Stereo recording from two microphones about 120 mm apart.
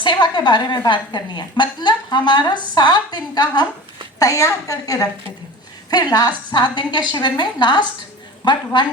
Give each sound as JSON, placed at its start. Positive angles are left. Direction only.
{"t": 0.0, "sound": "a woman's voice", "side_deg": 40}